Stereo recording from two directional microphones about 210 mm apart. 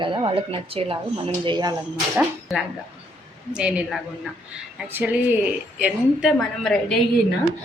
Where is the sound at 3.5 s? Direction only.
5° right (ahead or behind).